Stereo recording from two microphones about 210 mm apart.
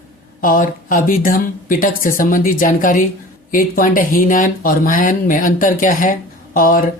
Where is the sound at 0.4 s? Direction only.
40° left (ahead or behind).